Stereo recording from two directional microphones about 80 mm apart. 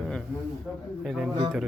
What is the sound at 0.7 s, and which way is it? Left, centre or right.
Speech, centre.